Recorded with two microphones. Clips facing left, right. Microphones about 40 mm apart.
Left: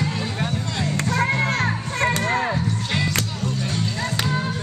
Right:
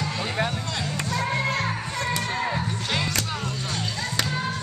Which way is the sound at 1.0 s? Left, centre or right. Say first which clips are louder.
Left 5 dB; left.